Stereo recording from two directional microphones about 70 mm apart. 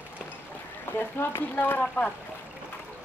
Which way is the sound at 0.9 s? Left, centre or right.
Left.